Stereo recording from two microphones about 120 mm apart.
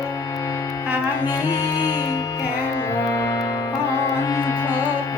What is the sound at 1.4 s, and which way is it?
Music, 35° left (ahead or behind).